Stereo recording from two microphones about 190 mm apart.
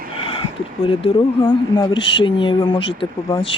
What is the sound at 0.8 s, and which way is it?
Speech, 30° left (ahead or behind).